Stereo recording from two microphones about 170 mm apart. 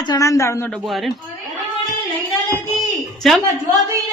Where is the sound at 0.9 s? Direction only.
Centre (ahead or behind).